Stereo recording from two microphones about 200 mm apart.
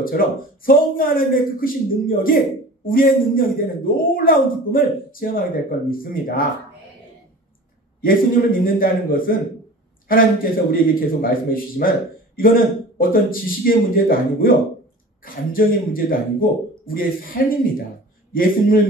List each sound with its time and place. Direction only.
0.2 s a man's voice: 45° left (ahead or behind)
8.0 s a man's voice: 45° left (ahead or behind)